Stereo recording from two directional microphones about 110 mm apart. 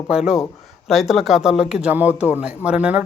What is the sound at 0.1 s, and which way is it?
A man's voice, 5° right (ahead or behind).